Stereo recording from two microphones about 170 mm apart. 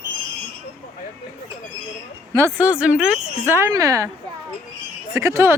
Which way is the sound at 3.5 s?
15° right (ahead or behind).